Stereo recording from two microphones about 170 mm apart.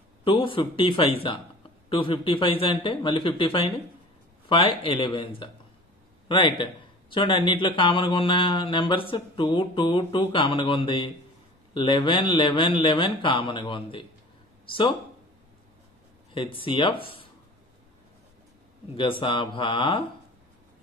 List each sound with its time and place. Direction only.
0.2 s a man's voice: 30° left (ahead or behind)
16.3 s speech: 30° left (ahead or behind)
18.9 s a man's voice: 30° left (ahead or behind)